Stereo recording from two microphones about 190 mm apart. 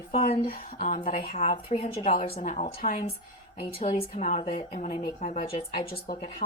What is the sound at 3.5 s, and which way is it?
A woman's voice, 30° left (ahead or behind).